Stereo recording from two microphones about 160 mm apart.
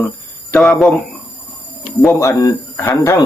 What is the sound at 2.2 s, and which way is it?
Speech, 20° left (ahead or behind).